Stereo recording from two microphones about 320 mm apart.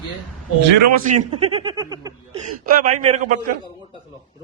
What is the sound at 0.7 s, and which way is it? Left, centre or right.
Speech, right.